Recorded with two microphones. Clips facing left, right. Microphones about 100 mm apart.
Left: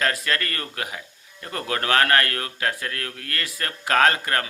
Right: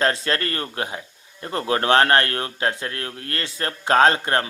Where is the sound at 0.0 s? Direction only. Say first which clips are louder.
Right 3 dB; 30° right (ahead or behind).